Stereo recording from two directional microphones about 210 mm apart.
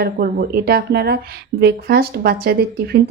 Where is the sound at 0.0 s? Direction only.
45° right (ahead or behind).